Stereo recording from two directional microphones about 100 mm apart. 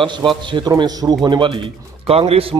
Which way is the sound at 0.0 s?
55° right (ahead or behind).